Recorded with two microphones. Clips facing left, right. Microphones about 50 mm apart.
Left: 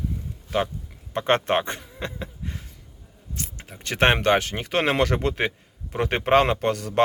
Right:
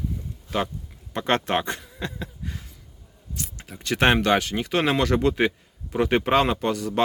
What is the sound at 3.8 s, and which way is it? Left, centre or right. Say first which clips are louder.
Speech: even; left.